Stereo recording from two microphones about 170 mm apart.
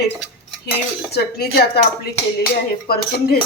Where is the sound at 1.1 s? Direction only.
70° left (ahead or behind).